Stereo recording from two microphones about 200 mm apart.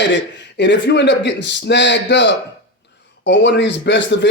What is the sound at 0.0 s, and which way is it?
A man's voice, 60° left (ahead or behind).